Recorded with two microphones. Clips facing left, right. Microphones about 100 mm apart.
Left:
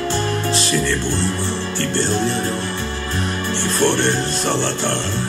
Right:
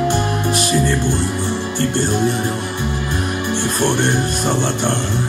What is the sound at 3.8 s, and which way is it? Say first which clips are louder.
Music: left 1 dB; 15° right (ahead or behind).